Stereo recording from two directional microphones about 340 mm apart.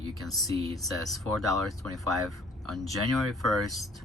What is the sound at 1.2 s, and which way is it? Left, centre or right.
Speech, right.